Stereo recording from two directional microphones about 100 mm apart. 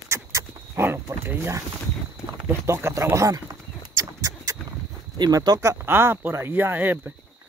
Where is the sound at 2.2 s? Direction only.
25° right (ahead or behind).